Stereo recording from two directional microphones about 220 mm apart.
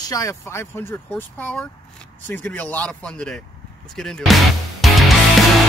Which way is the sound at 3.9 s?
Centre (ahead or behind).